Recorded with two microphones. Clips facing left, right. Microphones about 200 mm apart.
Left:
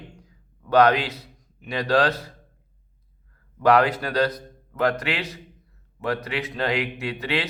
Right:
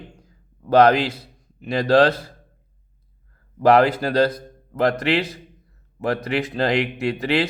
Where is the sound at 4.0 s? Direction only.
30° right (ahead or behind).